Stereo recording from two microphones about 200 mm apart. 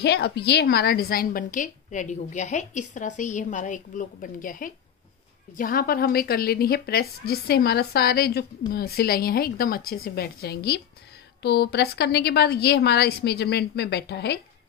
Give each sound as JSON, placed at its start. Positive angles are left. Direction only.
{"t": 0.0, "sound": "a woman's voice", "side_deg": 55}